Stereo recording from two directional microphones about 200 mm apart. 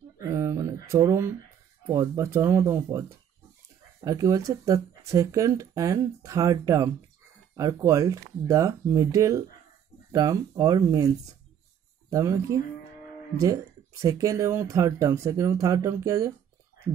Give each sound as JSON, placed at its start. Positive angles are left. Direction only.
{"t": 0.2, "sound": "a sound", "side_deg": -15}
{"t": 0.8, "sound": "speech", "side_deg": -15}
{"t": 12.1, "sound": "speech", "side_deg": -15}